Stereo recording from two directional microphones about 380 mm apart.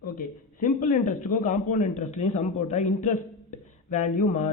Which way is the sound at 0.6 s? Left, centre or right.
Left.